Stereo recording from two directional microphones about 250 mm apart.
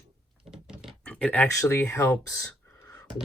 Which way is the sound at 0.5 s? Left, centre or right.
Centre.